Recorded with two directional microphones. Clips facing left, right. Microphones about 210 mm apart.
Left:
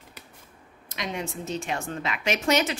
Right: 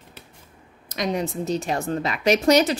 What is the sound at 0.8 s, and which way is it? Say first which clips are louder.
Speech: right 7 dB; 40° right (ahead or behind).